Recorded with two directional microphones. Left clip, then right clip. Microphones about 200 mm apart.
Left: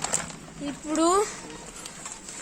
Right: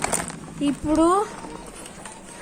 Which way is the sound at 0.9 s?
20° left (ahead or behind).